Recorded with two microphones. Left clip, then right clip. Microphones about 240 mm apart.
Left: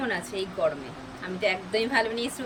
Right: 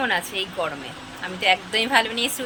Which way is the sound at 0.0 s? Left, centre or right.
Centre.